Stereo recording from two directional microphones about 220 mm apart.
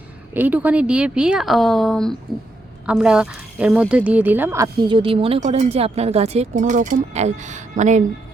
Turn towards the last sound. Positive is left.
turn(degrees=-35)  # may be behind; listen again after turning